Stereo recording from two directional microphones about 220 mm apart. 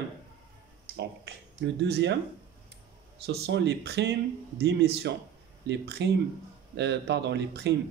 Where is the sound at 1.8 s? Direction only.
50° right (ahead or behind).